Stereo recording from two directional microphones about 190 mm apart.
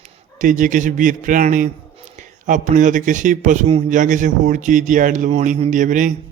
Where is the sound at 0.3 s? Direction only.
45° right (ahead or behind).